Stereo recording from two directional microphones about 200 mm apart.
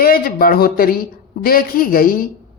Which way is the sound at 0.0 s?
45° left (ahead or behind).